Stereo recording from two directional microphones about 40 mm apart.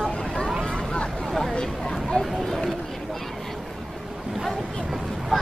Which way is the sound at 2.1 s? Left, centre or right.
Left.